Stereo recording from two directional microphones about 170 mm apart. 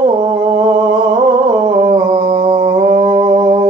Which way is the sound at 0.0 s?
25° right (ahead or behind).